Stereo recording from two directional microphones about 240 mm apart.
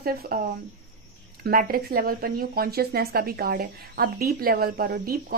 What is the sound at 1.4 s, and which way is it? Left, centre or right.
A woman's voice, right.